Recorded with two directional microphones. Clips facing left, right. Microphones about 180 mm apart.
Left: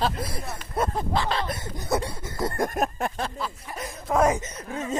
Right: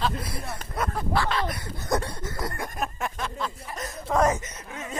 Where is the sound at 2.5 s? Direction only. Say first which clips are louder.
Left 6 dB; 45° left (ahead or behind).